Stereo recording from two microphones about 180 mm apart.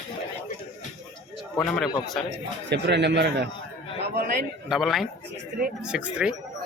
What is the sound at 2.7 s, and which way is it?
Speech, 70° right (ahead or behind).